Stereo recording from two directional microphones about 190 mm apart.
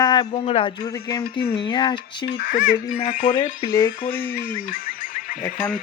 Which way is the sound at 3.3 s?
25° left (ahead or behind).